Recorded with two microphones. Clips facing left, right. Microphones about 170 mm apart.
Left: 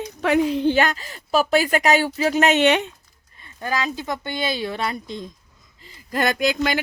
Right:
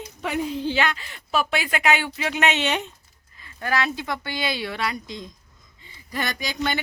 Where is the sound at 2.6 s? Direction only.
70° left (ahead or behind).